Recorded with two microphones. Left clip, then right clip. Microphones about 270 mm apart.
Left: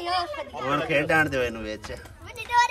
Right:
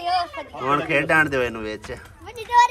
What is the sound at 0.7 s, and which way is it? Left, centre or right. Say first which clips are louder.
Speech: right 4 dB; centre.